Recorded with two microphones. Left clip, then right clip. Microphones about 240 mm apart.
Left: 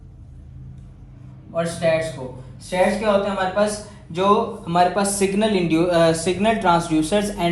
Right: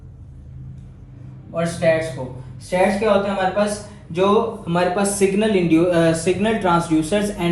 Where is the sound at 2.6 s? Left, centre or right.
Centre.